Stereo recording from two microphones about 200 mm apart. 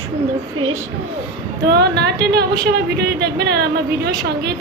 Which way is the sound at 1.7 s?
55° right (ahead or behind).